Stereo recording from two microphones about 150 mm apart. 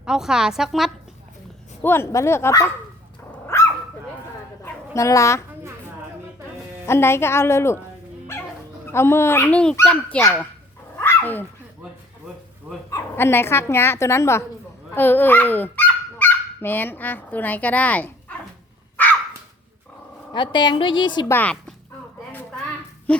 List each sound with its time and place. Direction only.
0.0 s a woman's voice: 5° right (ahead or behind)
1.8 s a woman's voice: 15° left (ahead or behind)
3.3 s dog: 15° left (ahead or behind)
6.8 s a woman's voice: 15° left (ahead or behind)
8.9 s a woman's voice: 15° left (ahead or behind)
10.9 s dog: 15° left (ahead or behind)
12.9 s speech: 15° left (ahead or behind)
20.3 s a woman's voice: 30° left (ahead or behind)
21.2 s a woman's voice: 10° left (ahead or behind)
23.1 s a woman's voice: 5° left (ahead or behind)